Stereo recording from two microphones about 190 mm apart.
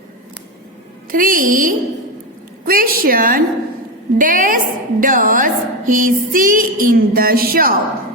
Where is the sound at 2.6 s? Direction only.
50° right (ahead or behind).